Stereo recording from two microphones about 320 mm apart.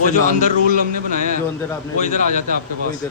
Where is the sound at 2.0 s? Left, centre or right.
Left.